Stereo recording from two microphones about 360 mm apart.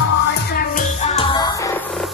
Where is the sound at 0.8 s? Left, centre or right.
Centre.